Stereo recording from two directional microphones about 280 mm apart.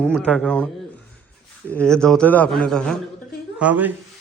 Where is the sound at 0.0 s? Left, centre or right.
Centre.